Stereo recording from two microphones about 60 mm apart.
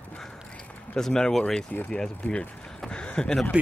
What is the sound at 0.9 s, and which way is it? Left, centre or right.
Speech, centre.